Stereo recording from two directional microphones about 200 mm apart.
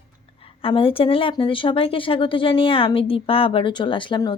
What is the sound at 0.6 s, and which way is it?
Speech, 25° left (ahead or behind).